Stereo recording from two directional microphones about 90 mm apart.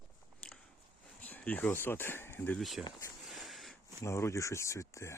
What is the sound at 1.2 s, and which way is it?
Speech, 15° left (ahead or behind).